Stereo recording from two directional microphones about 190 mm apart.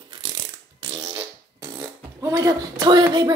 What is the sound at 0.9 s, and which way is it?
Fart, 20° right (ahead or behind).